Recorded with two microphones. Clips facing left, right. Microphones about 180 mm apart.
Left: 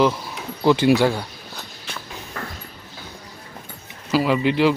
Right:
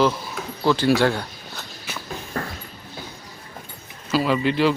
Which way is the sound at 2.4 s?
35° right (ahead or behind).